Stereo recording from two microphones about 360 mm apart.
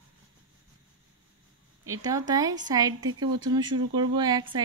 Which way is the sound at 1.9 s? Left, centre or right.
Centre.